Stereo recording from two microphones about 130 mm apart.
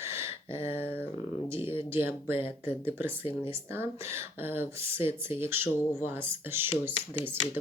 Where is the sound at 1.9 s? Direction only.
15° right (ahead or behind).